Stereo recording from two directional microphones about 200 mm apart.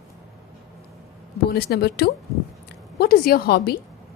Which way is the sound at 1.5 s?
50° left (ahead or behind).